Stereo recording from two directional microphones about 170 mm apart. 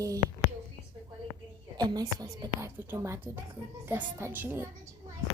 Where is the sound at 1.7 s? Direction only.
25° right (ahead or behind).